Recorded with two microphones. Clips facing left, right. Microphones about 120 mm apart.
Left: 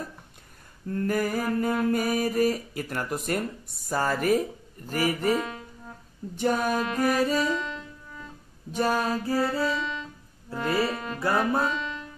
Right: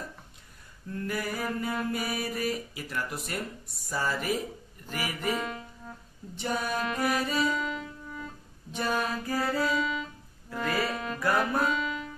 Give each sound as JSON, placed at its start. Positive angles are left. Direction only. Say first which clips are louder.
{"t": 0.8, "sound": "mantra", "louder": "left 7 dB", "side_deg": 45}
{"t": 6.3, "sound": "music", "louder": "left 6 dB", "side_deg": 45}
{"t": 7.5, "sound": "music", "louder": "even", "side_deg": -5}
{"t": 8.7, "sound": "music", "louder": "left 5 dB", "side_deg": 40}
{"t": 9.7, "sound": "music", "louder": "right 1 dB", "side_deg": -5}
{"t": 10.5, "sound": "music", "louder": "left 3 dB", "side_deg": 30}